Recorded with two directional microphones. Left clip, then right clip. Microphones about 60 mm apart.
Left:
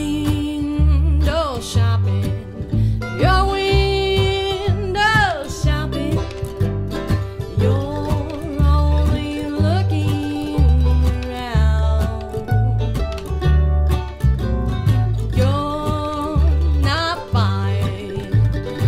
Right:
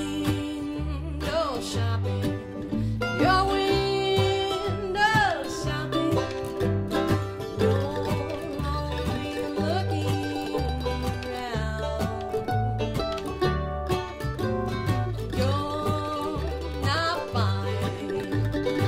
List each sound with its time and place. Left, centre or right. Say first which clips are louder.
0.0 s music: left 7 dB; right
3.2 s music: left 5 dB; centre
7.0 s music: even; left
8.6 s music: left 9 dB; right
15.3 s music: left 7 dB; right